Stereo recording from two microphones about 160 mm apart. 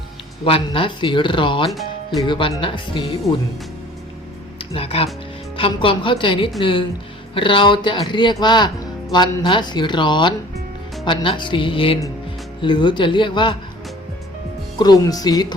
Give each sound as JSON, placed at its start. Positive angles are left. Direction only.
{"t": 0.4, "sound": "speech", "side_deg": 35}
{"t": 4.5, "sound": "a man's voice", "side_deg": 35}
{"t": 14.8, "sound": "a man's voice", "side_deg": 25}